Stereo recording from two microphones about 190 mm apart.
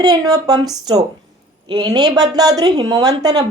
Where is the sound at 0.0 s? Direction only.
20° right (ahead or behind).